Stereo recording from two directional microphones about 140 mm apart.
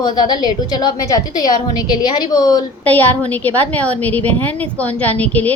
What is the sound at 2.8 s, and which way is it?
A woman's voice, 10° left (ahead or behind).